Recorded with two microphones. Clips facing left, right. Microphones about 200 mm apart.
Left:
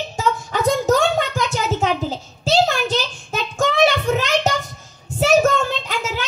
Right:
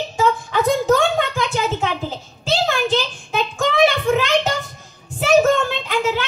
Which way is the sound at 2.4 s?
45° left (ahead or behind).